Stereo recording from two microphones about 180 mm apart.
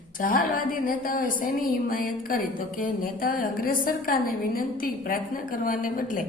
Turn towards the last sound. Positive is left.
turn(degrees=50)  # may be behind; listen again after turning